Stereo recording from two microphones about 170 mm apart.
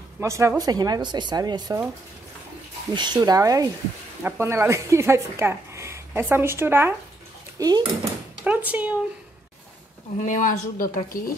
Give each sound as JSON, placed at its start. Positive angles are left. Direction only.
{"t": 0.2, "sound": "speech", "side_deg": -15}
{"t": 2.9, "sound": "speech", "side_deg": -25}
{"t": 7.5, "sound": "speech", "side_deg": -25}
{"t": 8.5, "sound": "speech", "side_deg": -10}
{"t": 10.2, "sound": "speech", "side_deg": 50}